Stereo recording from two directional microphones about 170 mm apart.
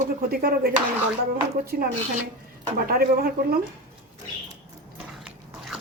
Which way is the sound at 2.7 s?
60° right (ahead or behind).